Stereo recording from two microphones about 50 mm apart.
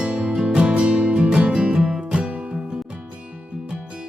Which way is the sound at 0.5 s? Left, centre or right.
Right.